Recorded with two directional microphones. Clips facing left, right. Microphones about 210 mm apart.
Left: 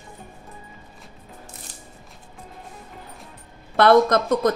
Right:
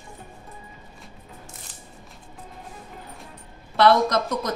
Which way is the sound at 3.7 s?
50° left (ahead or behind).